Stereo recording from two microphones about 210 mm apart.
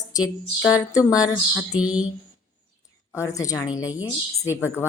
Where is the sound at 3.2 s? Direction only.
15° left (ahead or behind).